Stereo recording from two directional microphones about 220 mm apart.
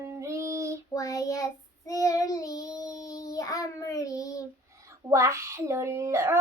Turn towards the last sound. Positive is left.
turn(degrees=-15)  # may be behind; listen again after turning